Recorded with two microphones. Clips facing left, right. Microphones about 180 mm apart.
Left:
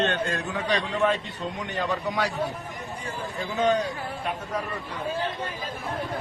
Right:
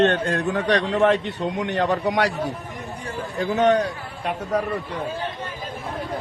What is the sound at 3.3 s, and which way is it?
Speech, 70° right (ahead or behind).